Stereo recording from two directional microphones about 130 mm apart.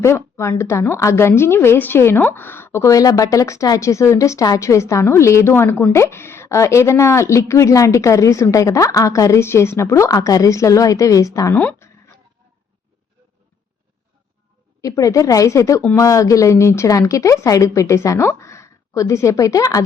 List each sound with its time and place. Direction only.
0.0 s a woman's voice: 20° left (ahead or behind)
14.8 s a woman's voice: 25° left (ahead or behind)